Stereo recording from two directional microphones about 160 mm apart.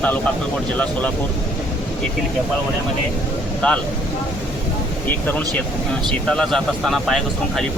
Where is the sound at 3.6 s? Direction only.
5° left (ahead or behind).